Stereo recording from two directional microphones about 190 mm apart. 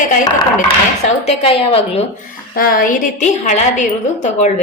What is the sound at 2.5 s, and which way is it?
A woman's voice, 50° left (ahead or behind).